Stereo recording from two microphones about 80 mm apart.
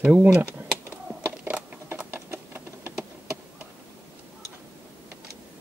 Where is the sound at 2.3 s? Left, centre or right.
Right.